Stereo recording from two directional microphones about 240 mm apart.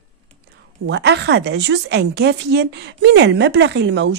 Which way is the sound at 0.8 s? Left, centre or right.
Right.